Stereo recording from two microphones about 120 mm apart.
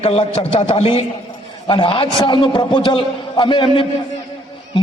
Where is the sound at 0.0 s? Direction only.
55° left (ahead or behind).